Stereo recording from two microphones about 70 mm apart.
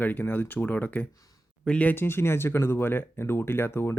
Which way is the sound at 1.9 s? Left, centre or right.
Left.